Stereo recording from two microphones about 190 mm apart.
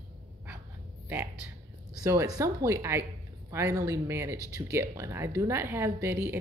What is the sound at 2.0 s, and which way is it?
A woman's voice, 15° right (ahead or behind).